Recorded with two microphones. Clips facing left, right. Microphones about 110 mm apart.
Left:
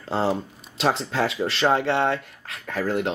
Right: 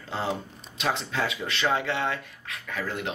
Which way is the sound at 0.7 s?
35° left (ahead or behind).